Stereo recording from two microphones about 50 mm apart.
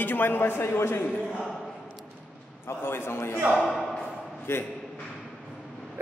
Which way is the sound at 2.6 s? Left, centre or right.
Left.